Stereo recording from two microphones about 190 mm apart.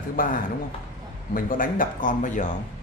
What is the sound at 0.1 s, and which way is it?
Speech, 45° left (ahead or behind).